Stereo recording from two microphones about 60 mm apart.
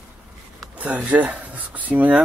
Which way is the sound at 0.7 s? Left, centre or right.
Right.